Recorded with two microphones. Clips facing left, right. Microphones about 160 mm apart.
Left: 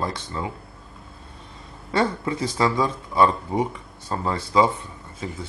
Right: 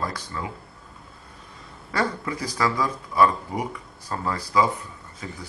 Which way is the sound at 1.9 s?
25° left (ahead or behind).